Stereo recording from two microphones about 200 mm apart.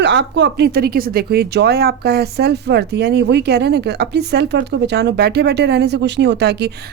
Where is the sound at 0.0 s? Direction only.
60° right (ahead or behind).